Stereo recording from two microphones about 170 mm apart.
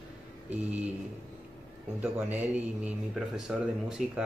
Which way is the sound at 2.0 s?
10° right (ahead or behind).